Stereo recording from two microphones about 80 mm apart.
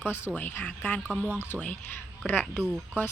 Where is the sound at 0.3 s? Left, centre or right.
Left.